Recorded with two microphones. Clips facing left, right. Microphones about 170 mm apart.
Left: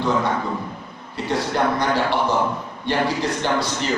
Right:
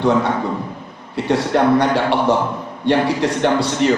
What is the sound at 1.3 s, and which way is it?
A man's voice, 70° right (ahead or behind).